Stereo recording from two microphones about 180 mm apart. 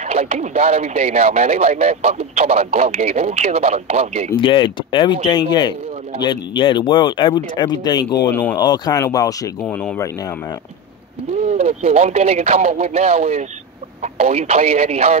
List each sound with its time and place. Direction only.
0.0 s speech: 35° right (ahead or behind)
4.4 s speech: 25° left (ahead or behind)
8.3 s speech: 10° left (ahead or behind)
8.5 s speech: 25° left (ahead or behind)
9.6 s speech: 5° left (ahead or behind)
11.4 s speech: 35° right (ahead or behind)